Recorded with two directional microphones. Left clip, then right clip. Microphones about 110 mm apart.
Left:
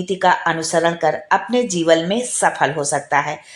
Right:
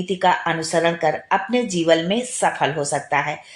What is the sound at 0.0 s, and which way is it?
A woman's voice, 30° left (ahead or behind).